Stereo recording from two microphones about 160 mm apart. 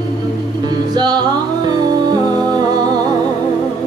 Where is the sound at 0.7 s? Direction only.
25° right (ahead or behind).